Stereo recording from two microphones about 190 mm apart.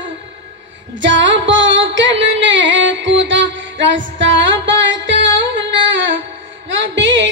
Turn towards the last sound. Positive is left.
turn(degrees=-75)  # may be behind; listen again after turning